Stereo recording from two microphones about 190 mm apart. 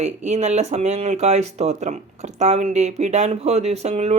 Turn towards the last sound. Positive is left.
turn(degrees=-35)  # may be behind; listen again after turning